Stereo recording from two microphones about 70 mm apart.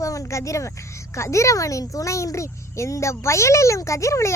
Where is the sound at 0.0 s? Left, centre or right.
Left.